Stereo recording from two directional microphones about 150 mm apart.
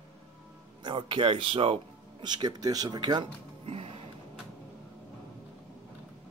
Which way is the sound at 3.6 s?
40° right (ahead or behind).